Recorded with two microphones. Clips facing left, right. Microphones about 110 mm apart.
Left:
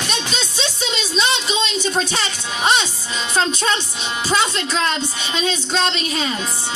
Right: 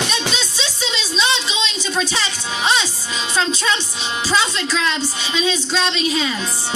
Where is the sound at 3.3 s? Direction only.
50° left (ahead or behind).